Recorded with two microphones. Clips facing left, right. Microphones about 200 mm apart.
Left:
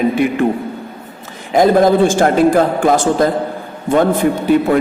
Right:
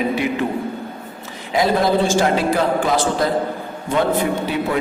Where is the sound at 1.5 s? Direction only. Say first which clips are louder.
Left 7 dB; 50° left (ahead or behind).